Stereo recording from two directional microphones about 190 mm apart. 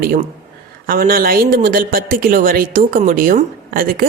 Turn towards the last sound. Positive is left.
turn(degrees=-50)  # may be behind; listen again after turning